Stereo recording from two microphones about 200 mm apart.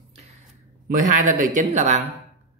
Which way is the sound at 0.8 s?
40° right (ahead or behind).